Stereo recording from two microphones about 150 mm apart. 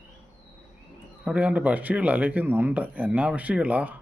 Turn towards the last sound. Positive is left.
turn(degrees=-10)  # may be behind; listen again after turning